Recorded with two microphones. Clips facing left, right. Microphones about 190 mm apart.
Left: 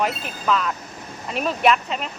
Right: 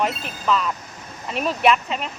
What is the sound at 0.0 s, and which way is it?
Speech, centre (ahead or behind).